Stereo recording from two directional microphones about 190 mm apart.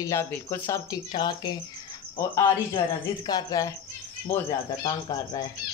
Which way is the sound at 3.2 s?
20° left (ahead or behind).